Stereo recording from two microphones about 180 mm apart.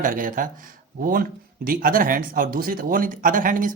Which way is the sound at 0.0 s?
50° right (ahead or behind).